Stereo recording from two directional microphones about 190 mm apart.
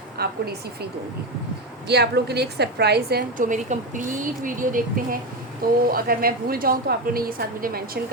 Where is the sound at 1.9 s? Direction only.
60° right (ahead or behind).